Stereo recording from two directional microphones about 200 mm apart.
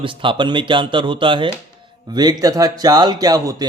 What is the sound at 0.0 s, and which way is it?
A man's voice, 25° right (ahead or behind).